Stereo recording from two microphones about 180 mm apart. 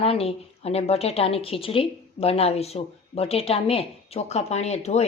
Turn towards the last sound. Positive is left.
turn(degrees=35)  # may be behind; listen again after turning